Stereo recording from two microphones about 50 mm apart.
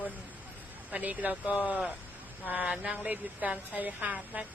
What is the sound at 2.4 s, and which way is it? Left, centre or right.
Speech, right.